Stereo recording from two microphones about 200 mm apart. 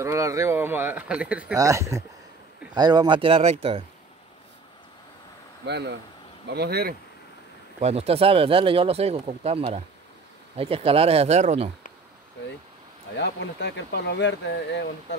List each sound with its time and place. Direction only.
0.0 s speech: 15° right (ahead or behind); by 3.8 s 30° right (ahead or behind)
5.7 s speech: 55° right (ahead or behind)
7.8 s speech: 30° right (ahead or behind)
13.2 s speech: 60° left (ahead or behind)